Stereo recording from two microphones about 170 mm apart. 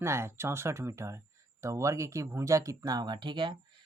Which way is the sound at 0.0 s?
15° right (ahead or behind).